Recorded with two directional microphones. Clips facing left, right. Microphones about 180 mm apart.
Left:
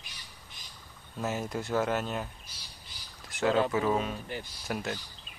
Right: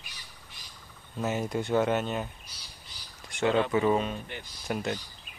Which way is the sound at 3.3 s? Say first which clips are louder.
Right 1 dB; centre (ahead or behind).